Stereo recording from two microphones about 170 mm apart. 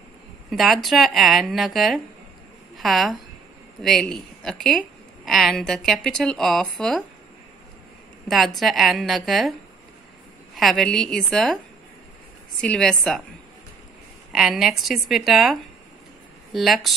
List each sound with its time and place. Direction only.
0.5 s a woman's voice: centre (ahead or behind)
8.3 s a woman's voice: centre (ahead or behind)
10.5 s a woman's voice: centre (ahead or behind)
14.3 s a woman's voice: centre (ahead or behind)
16.5 s a woman's voice: centre (ahead or behind)